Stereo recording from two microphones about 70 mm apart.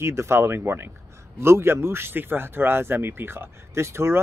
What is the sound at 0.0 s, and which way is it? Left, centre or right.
Speech, right.